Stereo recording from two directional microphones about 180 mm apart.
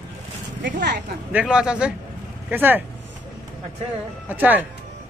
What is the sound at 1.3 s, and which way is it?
A woman's voice, 5° right (ahead or behind).